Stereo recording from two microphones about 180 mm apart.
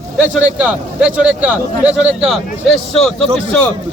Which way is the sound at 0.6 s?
5° right (ahead or behind).